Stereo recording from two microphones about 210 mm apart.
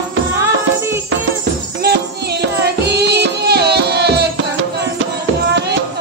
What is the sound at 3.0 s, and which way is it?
Music, 50° right (ahead or behind).